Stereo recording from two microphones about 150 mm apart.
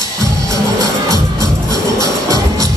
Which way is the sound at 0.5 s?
25° left (ahead or behind).